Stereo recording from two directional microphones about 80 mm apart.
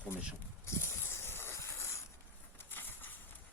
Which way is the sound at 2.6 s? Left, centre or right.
Left.